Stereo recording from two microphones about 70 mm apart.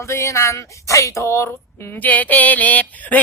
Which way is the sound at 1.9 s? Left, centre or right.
Left.